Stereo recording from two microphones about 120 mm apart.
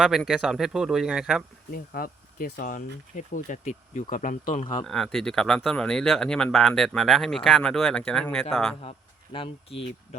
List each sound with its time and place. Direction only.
0.0 s speech: centre (ahead or behind)
2.6 s speech: 90° left
4.9 s speech: centre (ahead or behind)
8.8 s speech: 50° left (ahead or behind)